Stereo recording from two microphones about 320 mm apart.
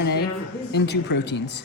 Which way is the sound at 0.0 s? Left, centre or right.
Left.